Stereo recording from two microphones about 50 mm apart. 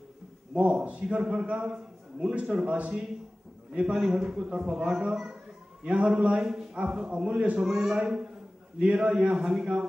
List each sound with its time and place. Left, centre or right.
0.6 s a man's voice: right
5.9 s a man's voice: right
6.3 s a man's voice: centre; by 7.6 s right
7.6 s a man's voice: centre